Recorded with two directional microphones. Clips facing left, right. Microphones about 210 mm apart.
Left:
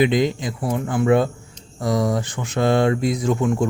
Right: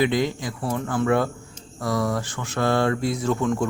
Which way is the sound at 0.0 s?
20° left (ahead or behind).